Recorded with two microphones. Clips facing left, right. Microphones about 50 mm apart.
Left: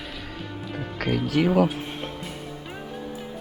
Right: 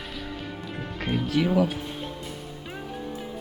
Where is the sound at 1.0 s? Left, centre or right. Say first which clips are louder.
Left 2 dB; left.